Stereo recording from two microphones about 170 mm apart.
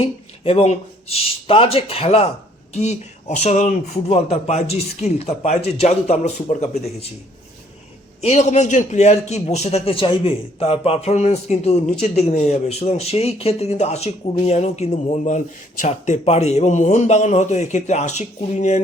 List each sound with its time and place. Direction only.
0.0 s a man's voice: 35° left (ahead or behind)
8.2 s a man's voice: 40° left (ahead or behind)